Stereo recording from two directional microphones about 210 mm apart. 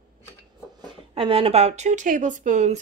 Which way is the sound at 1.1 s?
25° right (ahead or behind).